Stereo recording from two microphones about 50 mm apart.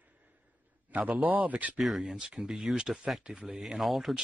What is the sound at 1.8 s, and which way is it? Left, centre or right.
Speech, centre.